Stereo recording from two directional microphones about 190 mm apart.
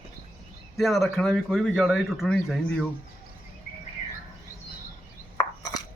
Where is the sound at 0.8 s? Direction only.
Centre (ahead or behind).